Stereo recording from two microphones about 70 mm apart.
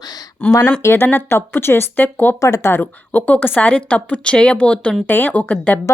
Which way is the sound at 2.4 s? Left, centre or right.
Left.